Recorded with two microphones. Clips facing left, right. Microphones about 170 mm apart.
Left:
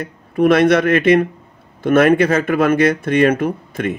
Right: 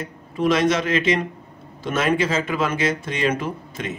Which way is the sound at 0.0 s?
60° left (ahead or behind).